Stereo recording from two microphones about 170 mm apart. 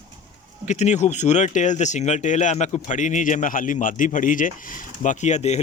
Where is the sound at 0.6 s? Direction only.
45° left (ahead or behind).